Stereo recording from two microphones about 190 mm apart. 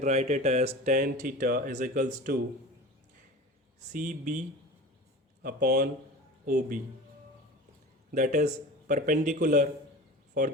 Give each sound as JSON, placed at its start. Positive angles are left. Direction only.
{"t": 0.0, "sound": "speech", "side_deg": -35}
{"t": 3.9, "sound": "speech", "side_deg": -45}
{"t": 8.1, "sound": "speech", "side_deg": -40}